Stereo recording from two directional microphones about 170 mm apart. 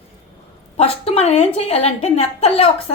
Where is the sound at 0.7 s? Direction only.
35° left (ahead or behind).